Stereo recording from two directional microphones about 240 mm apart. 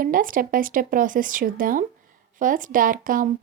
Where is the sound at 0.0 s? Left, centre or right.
Right.